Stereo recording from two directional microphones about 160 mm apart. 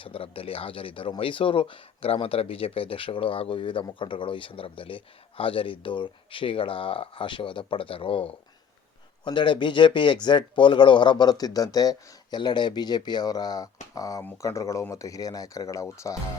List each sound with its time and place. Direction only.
0.0 s a man's voice: 35° left (ahead or behind); by 16.1 s 20° left (ahead or behind)